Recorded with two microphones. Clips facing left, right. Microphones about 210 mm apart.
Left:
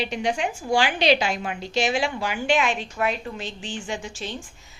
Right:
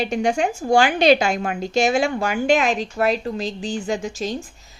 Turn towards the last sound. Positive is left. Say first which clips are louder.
# right 7 dB
turn(degrees=-40)  # may be behind; listen again after turning